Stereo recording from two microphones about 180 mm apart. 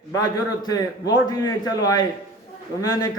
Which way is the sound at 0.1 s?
20° left (ahead or behind).